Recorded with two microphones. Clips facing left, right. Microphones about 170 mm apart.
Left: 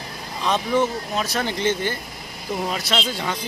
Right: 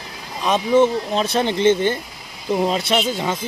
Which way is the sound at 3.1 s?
15° right (ahead or behind).